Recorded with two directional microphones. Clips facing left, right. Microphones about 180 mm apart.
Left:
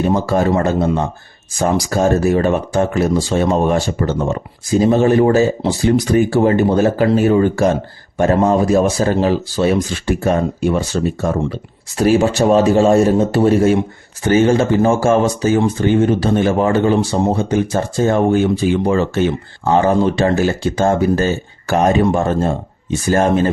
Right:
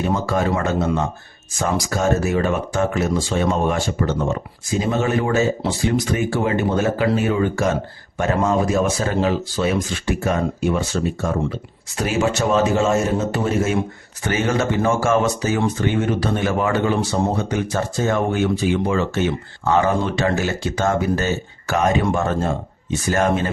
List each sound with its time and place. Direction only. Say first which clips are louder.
0.1 s speech: left 5 dB; 35° left (ahead or behind)